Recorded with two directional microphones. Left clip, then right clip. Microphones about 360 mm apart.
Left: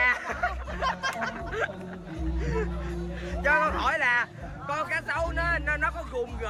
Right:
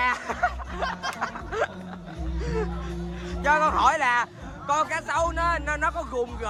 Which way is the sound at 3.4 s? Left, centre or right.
Centre.